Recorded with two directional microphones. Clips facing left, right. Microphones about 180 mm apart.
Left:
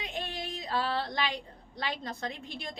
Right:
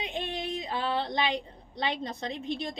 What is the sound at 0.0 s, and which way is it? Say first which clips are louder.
A woman's voice: right 4 dB; 20° right (ahead or behind).